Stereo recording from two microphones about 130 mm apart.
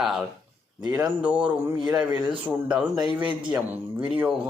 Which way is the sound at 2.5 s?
10° right (ahead or behind).